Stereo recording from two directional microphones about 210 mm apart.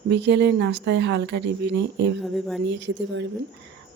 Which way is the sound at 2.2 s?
Centre (ahead or behind).